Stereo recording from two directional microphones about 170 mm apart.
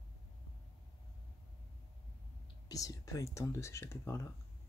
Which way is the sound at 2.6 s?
20° left (ahead or behind).